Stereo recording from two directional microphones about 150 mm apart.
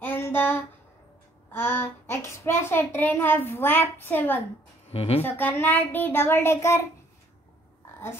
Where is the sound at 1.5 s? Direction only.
15° left (ahead or behind).